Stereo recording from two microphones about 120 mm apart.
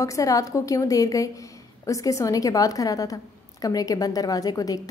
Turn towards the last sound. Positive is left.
turn(degrees=30)  # may be behind; listen again after turning